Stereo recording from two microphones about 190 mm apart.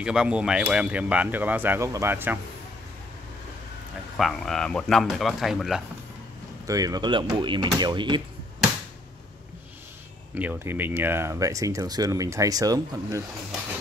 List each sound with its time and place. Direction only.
0.0 s speech: 5° right (ahead or behind)
4.2 s speech: centre (ahead or behind)
6.6 s speech: 20° right (ahead or behind)
10.3 s speech: 10° right (ahead or behind)